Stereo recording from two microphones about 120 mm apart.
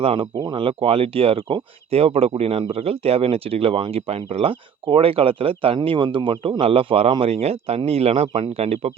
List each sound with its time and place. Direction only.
0.0 s speech: 55° right (ahead or behind)
0.3 s speech: 40° right (ahead or behind); by 8.9 s 55° right (ahead or behind)